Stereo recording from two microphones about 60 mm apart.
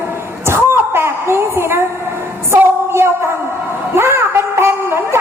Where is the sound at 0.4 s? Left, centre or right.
Right.